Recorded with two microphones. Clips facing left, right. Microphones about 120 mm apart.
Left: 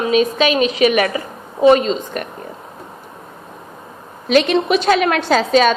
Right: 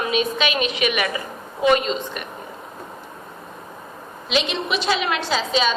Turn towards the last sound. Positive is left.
turn(degrees=50)  # may be behind; listen again after turning